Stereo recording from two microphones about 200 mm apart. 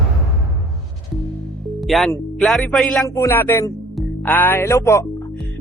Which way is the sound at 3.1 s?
15° left (ahead or behind).